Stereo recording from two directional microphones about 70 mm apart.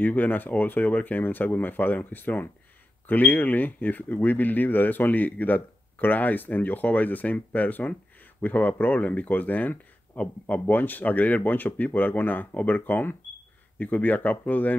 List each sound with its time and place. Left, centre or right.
0.0 s speech: left